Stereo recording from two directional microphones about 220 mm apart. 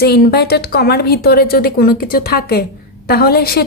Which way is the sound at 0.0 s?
45° left (ahead or behind).